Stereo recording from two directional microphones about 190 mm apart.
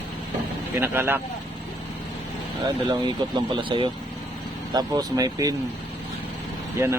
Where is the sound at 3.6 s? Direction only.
25° right (ahead or behind).